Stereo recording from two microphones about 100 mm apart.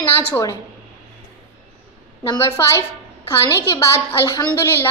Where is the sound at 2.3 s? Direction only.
30° left (ahead or behind).